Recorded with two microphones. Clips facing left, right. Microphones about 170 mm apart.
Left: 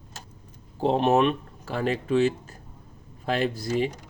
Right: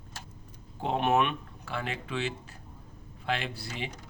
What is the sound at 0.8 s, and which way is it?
Speech, 35° left (ahead or behind).